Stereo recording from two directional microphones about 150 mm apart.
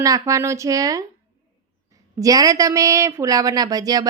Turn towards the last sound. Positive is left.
turn(degrees=-25)  # may be behind; listen again after turning